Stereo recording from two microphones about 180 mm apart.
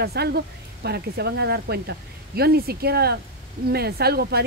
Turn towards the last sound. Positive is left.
turn(degrees=-60)  # may be behind; listen again after turning